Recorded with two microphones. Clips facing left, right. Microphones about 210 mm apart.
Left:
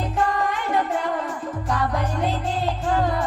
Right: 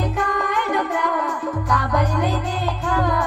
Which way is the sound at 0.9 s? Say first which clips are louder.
Right 2 dB; 25° left (ahead or behind).